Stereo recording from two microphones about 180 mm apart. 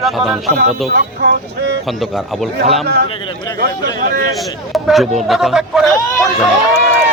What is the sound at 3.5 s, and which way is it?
Speech, 60° right (ahead or behind).